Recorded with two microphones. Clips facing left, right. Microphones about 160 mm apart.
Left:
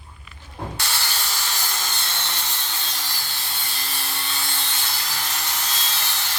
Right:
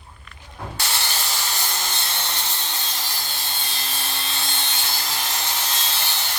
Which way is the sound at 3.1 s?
25° right (ahead or behind).